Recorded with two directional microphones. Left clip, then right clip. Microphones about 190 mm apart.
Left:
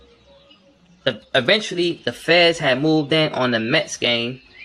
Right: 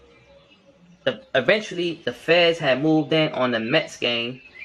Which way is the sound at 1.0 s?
40° left (ahead or behind).